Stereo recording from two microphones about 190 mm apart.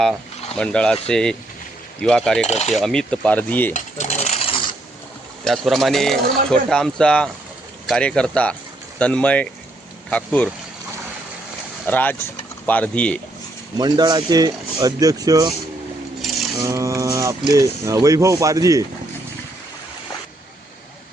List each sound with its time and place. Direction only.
0.5 s speech: 5° left (ahead or behind)
2.5 s mechanisms: 35° left (ahead or behind)
2.7 s speech: centre (ahead or behind)
3.7 s sewing machine: 40° left (ahead or behind)
5.5 s speech: centre (ahead or behind)
11.9 s speech: 10° left (ahead or behind)
13.7 s speech: 20° right (ahead or behind)
16.6 s speech: 15° right (ahead or behind)